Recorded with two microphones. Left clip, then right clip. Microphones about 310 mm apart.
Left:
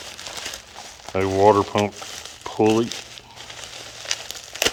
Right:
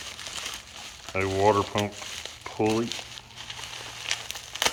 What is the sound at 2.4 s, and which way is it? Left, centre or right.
Crumpling, left.